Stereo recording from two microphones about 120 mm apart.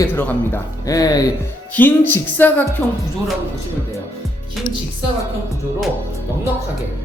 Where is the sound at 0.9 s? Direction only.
30° left (ahead or behind).